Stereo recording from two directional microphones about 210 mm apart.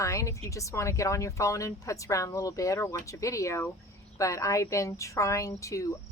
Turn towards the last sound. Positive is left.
turn(degrees=15)  # may be behind; listen again after turning